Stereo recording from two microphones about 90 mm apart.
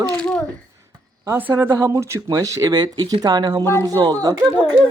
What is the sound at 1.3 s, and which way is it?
Speech, 20° right (ahead or behind).